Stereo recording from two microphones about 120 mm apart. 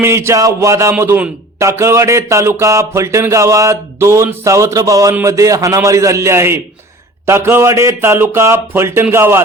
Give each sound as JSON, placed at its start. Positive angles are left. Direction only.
{"t": 0.0, "sound": "a man's voice", "side_deg": -20}